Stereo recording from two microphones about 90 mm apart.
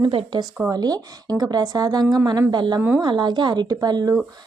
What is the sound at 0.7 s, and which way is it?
A woman's voice, 45° right (ahead or behind).